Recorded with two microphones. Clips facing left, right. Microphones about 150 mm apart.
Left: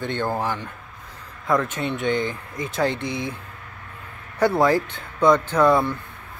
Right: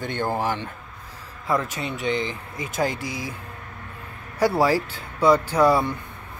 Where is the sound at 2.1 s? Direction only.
50° left (ahead or behind).